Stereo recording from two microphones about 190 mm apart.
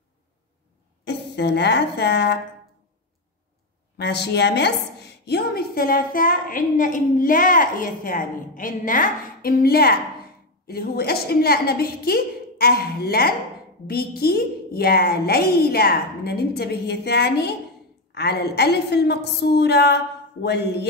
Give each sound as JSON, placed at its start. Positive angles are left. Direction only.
{"t": 1.0, "sound": "a woman's voice", "side_deg": 60}
{"t": 4.0, "sound": "a woman's voice", "side_deg": 60}